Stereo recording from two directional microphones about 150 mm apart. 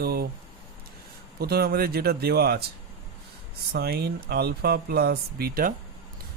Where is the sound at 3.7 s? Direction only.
90° right; by 5.7 s 75° right (ahead or behind).